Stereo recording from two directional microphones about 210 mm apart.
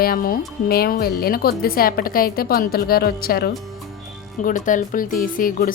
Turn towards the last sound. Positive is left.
turn(degrees=40)  # may be behind; listen again after turning